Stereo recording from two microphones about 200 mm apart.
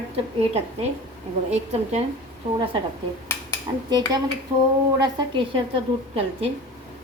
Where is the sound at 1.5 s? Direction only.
35° right (ahead or behind).